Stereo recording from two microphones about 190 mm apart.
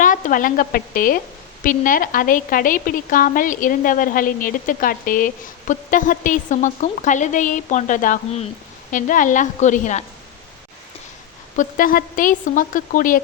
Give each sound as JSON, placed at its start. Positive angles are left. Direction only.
{"t": 0.0, "sound": "a woman's voice", "side_deg": 45}
{"t": 11.5, "sound": "a woman's voice", "side_deg": 45}